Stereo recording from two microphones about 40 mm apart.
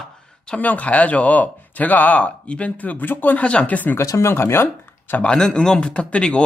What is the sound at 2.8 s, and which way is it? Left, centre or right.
Speech, left.